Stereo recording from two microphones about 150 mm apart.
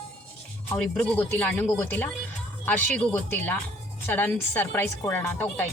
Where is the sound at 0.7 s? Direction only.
10° left (ahead or behind).